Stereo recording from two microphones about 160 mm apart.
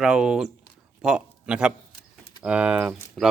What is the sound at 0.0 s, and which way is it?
Speech, 5° right (ahead or behind).